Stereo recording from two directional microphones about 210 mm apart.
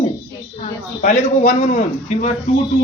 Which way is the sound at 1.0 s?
35° left (ahead or behind).